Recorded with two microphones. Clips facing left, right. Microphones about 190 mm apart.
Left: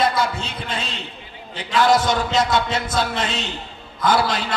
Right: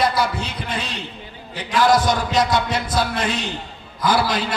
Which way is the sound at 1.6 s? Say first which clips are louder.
Even; 25° left (ahead or behind).